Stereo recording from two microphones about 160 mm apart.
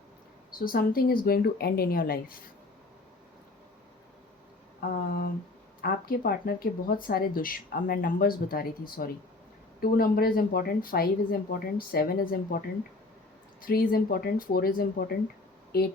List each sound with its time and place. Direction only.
0.6 s speech: 65° left (ahead or behind)
4.8 s a sound: 70° left (ahead or behind)
5.8 s speech: 75° left (ahead or behind)
13.7 s speech: 65° left (ahead or behind)